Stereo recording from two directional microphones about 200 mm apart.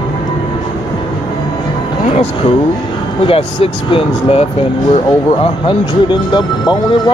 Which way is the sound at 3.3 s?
25° left (ahead or behind).